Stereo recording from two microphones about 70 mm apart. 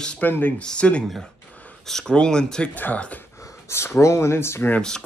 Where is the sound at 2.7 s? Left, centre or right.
Left.